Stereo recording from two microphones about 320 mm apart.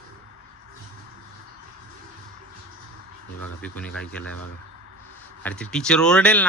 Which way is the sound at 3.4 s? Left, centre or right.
Centre.